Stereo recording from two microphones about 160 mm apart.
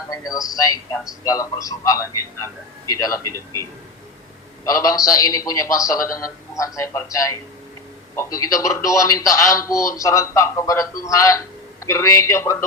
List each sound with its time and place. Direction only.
0.3 s speech: 20° left (ahead or behind)